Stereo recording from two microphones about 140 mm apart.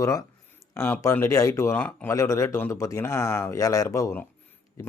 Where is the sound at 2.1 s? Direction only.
20° left (ahead or behind).